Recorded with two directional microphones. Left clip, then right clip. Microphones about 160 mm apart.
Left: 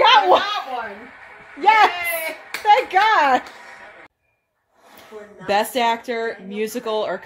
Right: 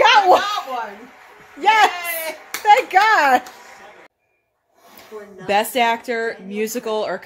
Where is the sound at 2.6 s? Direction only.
10° right (ahead or behind).